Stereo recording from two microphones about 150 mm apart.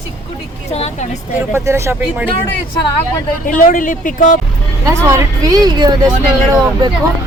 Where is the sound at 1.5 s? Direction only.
20° right (ahead or behind).